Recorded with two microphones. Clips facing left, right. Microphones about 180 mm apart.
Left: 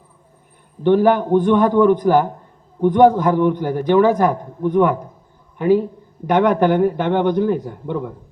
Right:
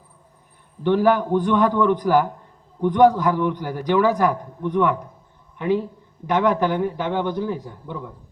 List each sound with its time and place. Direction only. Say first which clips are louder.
0.9 s a man's voice: left 4 dB; 45° left (ahead or behind)
6.4 s a man's voice: left 6 dB; 60° left (ahead or behind)